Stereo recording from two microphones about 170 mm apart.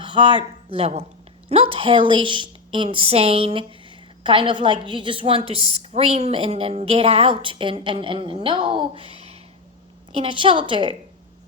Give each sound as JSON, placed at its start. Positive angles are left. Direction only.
{"t": 0.0, "sound": "a woman's voice", "side_deg": -25}